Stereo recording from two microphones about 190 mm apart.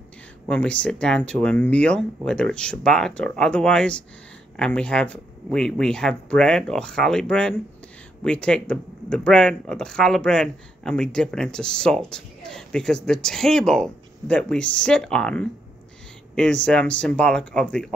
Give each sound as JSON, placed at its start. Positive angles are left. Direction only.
{"t": 0.5, "sound": "speech", "side_deg": 5}